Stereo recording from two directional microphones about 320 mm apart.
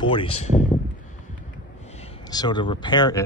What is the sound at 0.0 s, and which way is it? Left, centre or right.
Speech, centre.